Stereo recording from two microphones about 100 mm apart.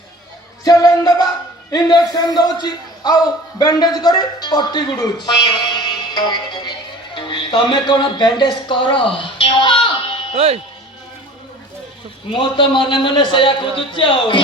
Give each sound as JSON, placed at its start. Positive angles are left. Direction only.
{"t": 0.6, "sound": "music", "side_deg": 40}
{"t": 1.7, "sound": "a man's voice", "side_deg": 40}
{"t": 5.2, "sound": "music", "side_deg": 45}
{"t": 10.3, "sound": "speech", "side_deg": -90}
{"t": 12.3, "sound": "a man's voice", "side_deg": 55}